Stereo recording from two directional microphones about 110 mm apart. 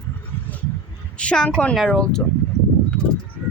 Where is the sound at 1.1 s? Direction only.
10° left (ahead or behind).